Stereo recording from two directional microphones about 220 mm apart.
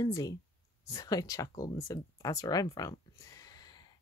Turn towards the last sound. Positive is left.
turn(degrees=15)  # may be behind; listen again after turning